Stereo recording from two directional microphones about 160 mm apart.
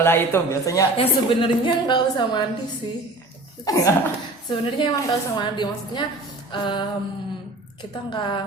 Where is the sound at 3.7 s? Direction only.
25° left (ahead or behind).